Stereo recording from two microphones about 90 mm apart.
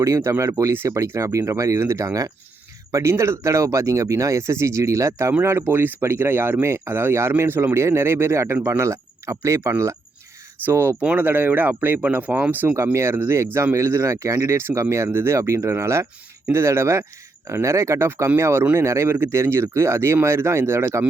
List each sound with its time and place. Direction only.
0.0 s speech: 35° right (ahead or behind)
12.7 s speech: 35° right (ahead or behind)